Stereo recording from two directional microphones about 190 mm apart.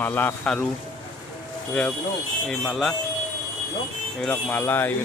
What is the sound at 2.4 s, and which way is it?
Speech, centre (ahead or behind).